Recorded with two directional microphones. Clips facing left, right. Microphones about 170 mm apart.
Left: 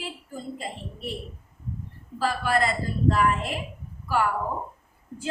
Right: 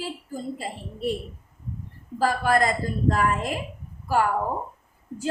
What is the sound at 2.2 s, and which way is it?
A woman's voice, 45° right (ahead or behind).